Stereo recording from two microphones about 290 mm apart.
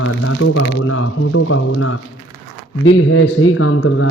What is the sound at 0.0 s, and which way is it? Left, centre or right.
Speech, left.